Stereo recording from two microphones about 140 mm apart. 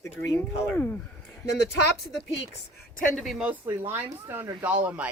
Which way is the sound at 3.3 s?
10° right (ahead or behind).